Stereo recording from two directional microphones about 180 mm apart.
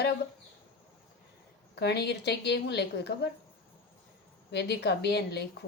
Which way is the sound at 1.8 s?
65° left (ahead or behind).